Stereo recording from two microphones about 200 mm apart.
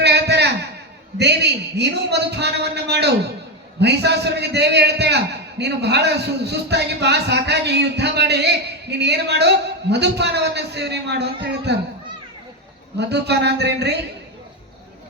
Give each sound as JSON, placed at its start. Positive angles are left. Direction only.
{"t": 0.0, "sound": "a sound", "side_deg": -55}
{"t": 1.2, "sound": "a man's voice", "side_deg": -55}
{"t": 13.0, "sound": "a man's voice", "side_deg": -55}